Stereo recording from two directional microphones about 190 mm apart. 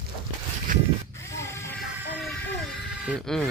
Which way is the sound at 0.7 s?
45° right (ahead or behind).